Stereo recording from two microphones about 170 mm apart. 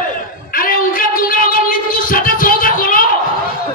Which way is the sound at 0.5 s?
55° left (ahead or behind).